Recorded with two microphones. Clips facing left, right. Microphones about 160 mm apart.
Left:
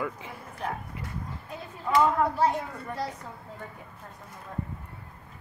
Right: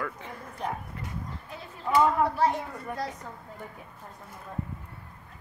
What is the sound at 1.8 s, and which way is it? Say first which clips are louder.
Speech: even; 5° right (ahead or behind).